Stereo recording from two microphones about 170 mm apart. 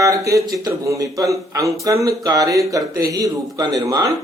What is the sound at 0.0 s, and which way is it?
A man's voice, 20° right (ahead or behind).